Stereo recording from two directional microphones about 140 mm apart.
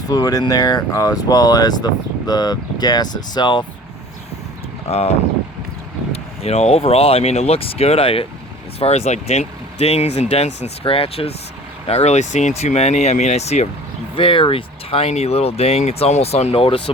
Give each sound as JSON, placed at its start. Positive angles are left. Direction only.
{"t": 0.1, "sound": "speech", "side_deg": 25}
{"t": 4.9, "sound": "speech", "side_deg": 45}
{"t": 6.4, "sound": "speech", "side_deg": 45}
{"t": 14.2, "sound": "speech", "side_deg": 40}